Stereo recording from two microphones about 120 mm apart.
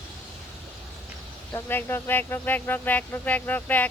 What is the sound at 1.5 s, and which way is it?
Speech, 20° left (ahead or behind).